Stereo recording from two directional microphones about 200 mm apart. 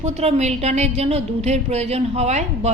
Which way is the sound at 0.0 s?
30° right (ahead or behind).